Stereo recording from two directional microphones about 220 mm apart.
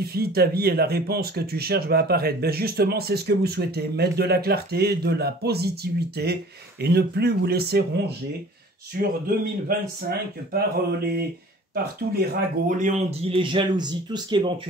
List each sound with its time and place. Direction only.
0.0 s speech: 45° right (ahead or behind)
8.9 s speech: 40° right (ahead or behind)
13.4 s speech: 20° right (ahead or behind)